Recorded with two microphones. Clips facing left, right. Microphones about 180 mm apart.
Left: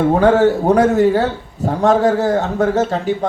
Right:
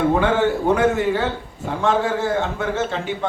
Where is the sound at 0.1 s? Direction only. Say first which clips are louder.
Left 6 dB; 40° left (ahead or behind).